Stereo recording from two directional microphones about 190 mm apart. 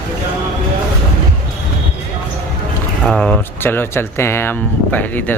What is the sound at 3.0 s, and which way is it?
Speech, 5° left (ahead or behind).